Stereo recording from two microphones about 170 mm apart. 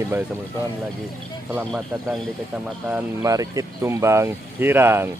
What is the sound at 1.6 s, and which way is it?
Speech, centre (ahead or behind).